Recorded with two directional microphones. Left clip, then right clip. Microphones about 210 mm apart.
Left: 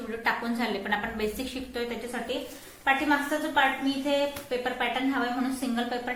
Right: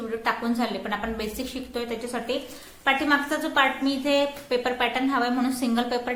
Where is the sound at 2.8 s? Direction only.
35° right (ahead or behind).